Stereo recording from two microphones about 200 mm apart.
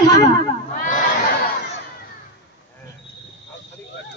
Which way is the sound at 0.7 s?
40° left (ahead or behind).